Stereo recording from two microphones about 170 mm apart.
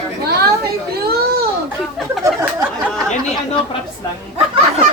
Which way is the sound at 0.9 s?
70° right (ahead or behind).